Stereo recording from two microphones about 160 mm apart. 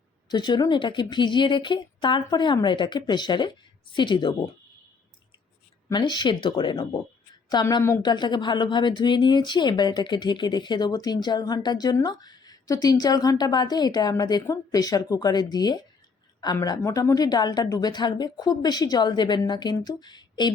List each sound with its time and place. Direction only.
0.3 s speech: 25° left (ahead or behind)
5.9 s speech: 30° left (ahead or behind)
8.1 s speech: 30° left (ahead or behind)